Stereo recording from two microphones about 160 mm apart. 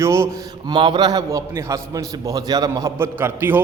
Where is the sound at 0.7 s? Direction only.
30° right (ahead or behind); by 3.6 s 15° right (ahead or behind).